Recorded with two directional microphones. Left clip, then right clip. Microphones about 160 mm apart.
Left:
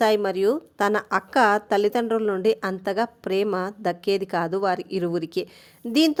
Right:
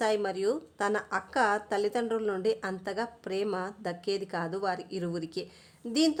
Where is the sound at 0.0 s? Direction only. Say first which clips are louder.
Left 8 dB; 35° left (ahead or behind).